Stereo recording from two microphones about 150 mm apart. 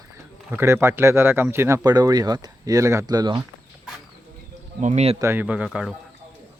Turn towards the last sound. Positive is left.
turn(degrees=-5)  # may be behind; listen again after turning